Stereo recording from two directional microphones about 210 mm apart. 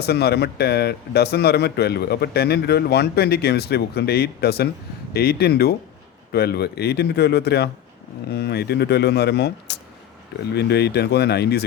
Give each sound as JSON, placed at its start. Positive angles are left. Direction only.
{"t": 0.0, "sound": "speech", "side_deg": 50}